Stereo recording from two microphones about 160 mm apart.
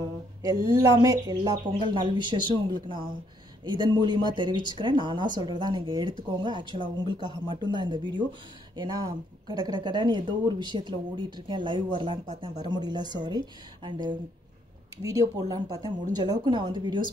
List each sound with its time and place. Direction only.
0.4 s speech: 20° right (ahead or behind)
12.3 s speech: 45° right (ahead or behind)
12.6 s speech: 25° right (ahead or behind)